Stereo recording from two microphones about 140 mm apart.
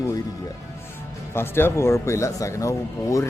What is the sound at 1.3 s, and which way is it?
Speech, 15° left (ahead or behind).